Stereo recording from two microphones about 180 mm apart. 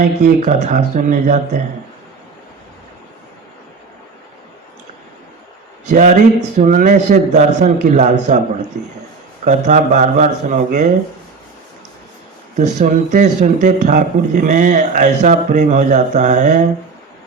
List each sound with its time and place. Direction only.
0.0 s speech: 45° right (ahead or behind)
5.9 s a man's voice: 40° right (ahead or behind)
12.5 s speech: 45° right (ahead or behind)